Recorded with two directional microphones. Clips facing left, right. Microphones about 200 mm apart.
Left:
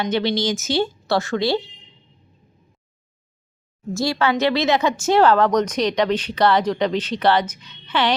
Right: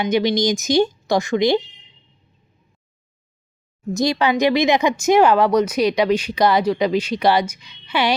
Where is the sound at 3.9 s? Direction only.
20° right (ahead or behind).